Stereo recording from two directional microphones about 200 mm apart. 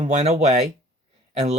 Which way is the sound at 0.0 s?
35° right (ahead or behind).